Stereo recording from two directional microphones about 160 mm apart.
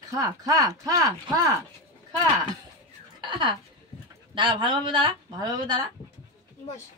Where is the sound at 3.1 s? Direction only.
30° right (ahead or behind).